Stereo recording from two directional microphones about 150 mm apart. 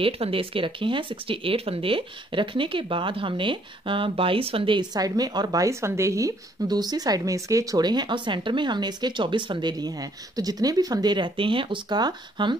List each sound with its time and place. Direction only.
0.0 s speech: 40° right (ahead or behind)